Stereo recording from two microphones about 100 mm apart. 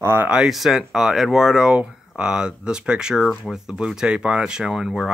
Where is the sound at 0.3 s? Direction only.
5° right (ahead or behind).